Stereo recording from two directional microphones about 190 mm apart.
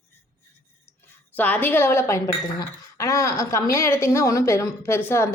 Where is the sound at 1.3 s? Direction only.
10° left (ahead or behind).